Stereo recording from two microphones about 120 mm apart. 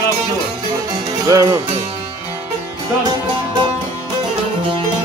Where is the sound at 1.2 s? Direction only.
25° right (ahead or behind).